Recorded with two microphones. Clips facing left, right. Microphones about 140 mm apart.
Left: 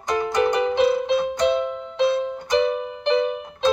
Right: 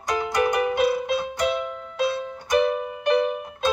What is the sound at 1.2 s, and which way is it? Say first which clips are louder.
Music: left 5 dB; 20° left (ahead or behind).